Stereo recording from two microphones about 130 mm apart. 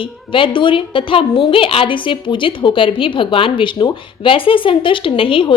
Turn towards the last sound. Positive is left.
turn(degrees=45)  # may be behind; listen again after turning